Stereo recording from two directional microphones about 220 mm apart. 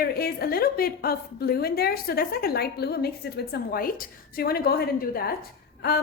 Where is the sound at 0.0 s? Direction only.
45° left (ahead or behind).